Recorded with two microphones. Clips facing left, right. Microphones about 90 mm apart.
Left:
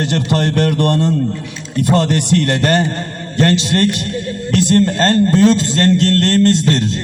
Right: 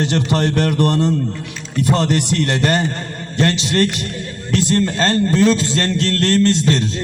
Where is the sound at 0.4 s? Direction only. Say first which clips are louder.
Left 1 dB; 40° left (ahead or behind).